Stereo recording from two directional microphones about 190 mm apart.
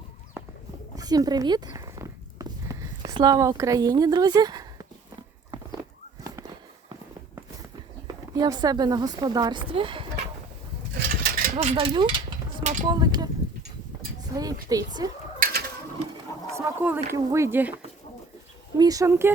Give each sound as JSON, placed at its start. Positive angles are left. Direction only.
{"t": 0.9, "sound": "a sound", "side_deg": -20}
{"t": 8.0, "sound": "speech", "side_deg": -20}
{"t": 10.9, "sound": "mechanisms", "side_deg": -55}
{"t": 11.5, "sound": "a sound", "side_deg": -30}
{"t": 12.9, "sound": "speech", "side_deg": -20}
{"t": 14.3, "sound": "speech", "side_deg": -20}
{"t": 15.4, "sound": "bird", "side_deg": -55}
{"t": 16.5, "sound": "speech", "side_deg": -15}
{"t": 18.8, "sound": "speech", "side_deg": -20}